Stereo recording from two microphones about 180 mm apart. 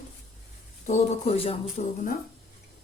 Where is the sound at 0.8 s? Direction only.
35° left (ahead or behind).